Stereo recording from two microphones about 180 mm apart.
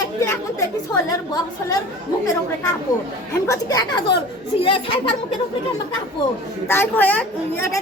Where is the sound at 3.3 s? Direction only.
20° left (ahead or behind).